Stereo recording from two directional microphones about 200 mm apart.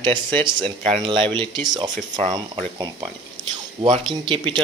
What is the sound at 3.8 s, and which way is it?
Speech, 25° right (ahead or behind).